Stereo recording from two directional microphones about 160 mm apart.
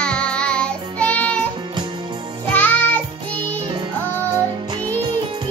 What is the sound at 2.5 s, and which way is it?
Music, 10° left (ahead or behind).